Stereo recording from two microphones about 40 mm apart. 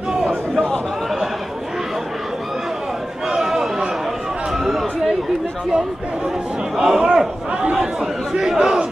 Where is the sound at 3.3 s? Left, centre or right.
Centre.